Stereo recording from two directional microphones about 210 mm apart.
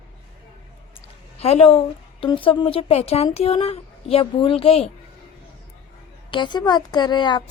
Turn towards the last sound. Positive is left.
turn(degrees=20)  # may be behind; listen again after turning